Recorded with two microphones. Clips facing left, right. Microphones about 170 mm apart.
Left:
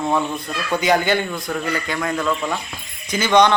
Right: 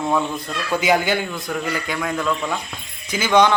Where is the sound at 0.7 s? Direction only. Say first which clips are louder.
Left 1 dB; 5° right (ahead or behind).